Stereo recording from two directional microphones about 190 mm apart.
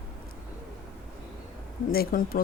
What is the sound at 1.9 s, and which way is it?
Speech, 50° left (ahead or behind).